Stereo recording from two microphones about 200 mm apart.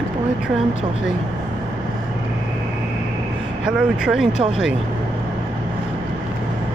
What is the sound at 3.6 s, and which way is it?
Speech, 5° right (ahead or behind).